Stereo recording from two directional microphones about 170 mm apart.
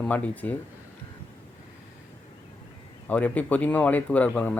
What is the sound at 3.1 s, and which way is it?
A man's voice, 10° left (ahead or behind).